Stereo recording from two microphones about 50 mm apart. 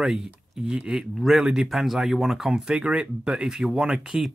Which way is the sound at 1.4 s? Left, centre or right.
Centre.